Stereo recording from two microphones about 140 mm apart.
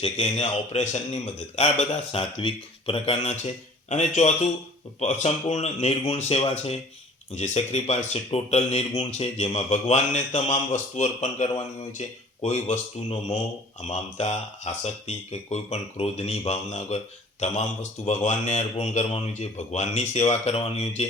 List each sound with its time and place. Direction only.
0.0 s speech: 50° left (ahead or behind)
2.4 s speech: 40° left (ahead or behind)